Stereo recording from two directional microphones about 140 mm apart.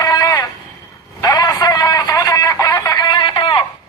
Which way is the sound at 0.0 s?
25° left (ahead or behind).